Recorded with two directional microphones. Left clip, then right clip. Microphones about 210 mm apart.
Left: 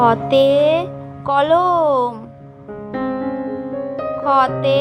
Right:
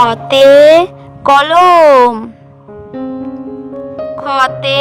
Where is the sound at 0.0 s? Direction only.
55° right (ahead or behind).